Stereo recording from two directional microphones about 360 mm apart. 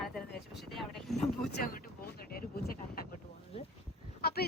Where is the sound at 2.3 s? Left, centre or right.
Left.